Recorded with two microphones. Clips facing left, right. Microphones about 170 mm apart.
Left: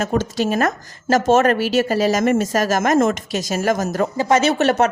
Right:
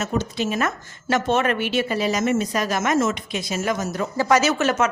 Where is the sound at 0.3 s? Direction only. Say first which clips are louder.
Left 5 dB; 40° left (ahead or behind).